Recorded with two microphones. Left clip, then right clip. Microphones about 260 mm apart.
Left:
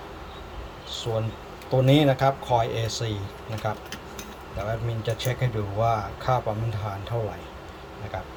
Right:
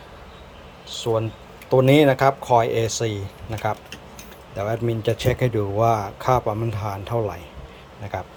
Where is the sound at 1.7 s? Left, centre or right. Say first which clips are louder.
Right 5 dB; centre.